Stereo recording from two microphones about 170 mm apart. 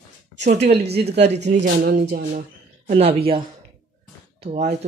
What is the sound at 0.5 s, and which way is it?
Speech, 80° right.